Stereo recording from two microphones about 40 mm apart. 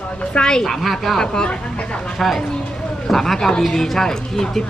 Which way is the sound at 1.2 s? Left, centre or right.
Centre.